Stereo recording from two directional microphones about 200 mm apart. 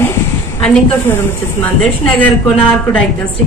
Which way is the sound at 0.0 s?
10° left (ahead or behind).